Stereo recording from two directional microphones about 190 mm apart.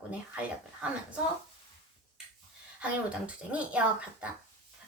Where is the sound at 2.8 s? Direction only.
5° right (ahead or behind).